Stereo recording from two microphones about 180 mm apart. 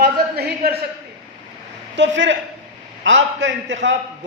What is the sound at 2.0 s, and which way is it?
A man's voice, 90° right.